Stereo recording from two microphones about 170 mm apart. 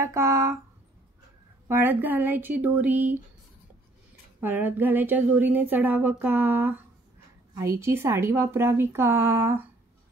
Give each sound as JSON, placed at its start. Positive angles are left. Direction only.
{"t": 0.0, "sound": "speech", "side_deg": -15}
{"t": 1.7, "sound": "speech", "side_deg": -15}
{"t": 4.4, "sound": "speech", "side_deg": -10}